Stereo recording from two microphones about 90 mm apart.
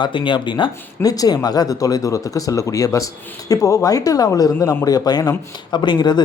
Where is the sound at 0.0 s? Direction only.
65° left (ahead or behind).